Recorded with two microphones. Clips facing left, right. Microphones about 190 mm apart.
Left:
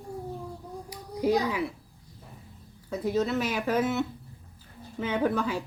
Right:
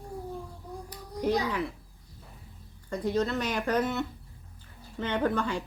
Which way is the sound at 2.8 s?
5° left (ahead or behind).